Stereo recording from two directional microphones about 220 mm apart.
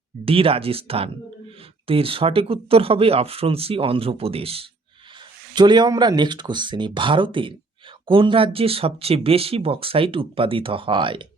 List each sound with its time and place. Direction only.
0.3 s speech: 25° right (ahead or behind)